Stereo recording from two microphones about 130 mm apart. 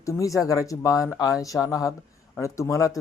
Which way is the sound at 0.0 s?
25° left (ahead or behind).